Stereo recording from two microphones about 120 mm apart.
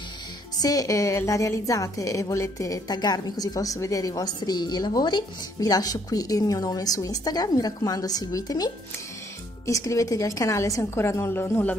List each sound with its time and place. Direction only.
0.6 s a woman's voice: 30° left (ahead or behind)